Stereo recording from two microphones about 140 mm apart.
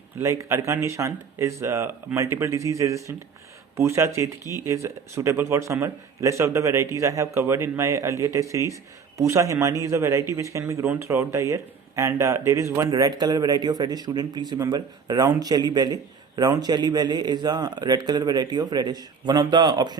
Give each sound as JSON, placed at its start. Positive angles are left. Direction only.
{"t": 0.2, "sound": "a man's voice", "side_deg": -20}